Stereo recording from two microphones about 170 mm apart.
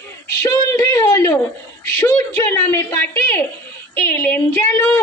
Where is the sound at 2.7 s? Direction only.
10° left (ahead or behind).